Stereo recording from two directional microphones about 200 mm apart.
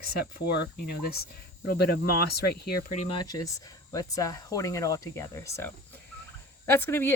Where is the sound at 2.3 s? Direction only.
50° left (ahead or behind).